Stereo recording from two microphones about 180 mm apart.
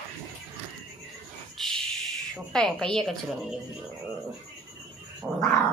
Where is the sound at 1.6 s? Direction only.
Centre (ahead or behind).